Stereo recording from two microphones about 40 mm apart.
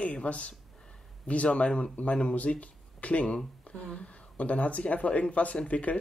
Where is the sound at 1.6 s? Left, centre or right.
Left.